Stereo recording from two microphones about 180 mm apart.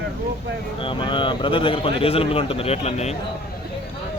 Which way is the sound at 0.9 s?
25° left (ahead or behind).